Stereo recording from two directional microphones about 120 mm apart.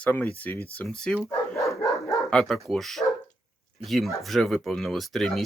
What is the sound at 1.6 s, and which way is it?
Dog, 25° left (ahead or behind).